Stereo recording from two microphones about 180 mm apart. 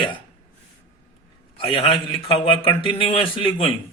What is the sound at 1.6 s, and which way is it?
A man's voice, 30° left (ahead or behind).